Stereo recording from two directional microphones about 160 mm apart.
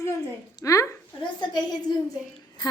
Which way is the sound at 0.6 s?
20° left (ahead or behind).